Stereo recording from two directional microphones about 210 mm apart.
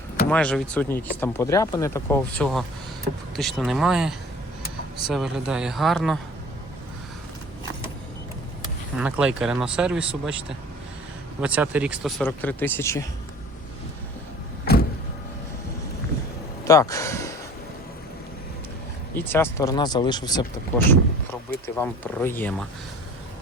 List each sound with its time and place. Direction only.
0.3 s speech: 5° left (ahead or behind)
9.0 s speech: 5° right (ahead or behind)
11.3 s speech: 5° right (ahead or behind); by 13.1 s 15° left (ahead or behind)
14.6 s power windows: 45° left (ahead or behind)
16.6 s speech: 15° left (ahead or behind)
19.1 s speech: 10° left (ahead or behind)